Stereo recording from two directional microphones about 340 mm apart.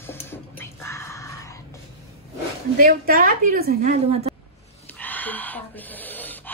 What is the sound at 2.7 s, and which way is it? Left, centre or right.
A woman's voice, right.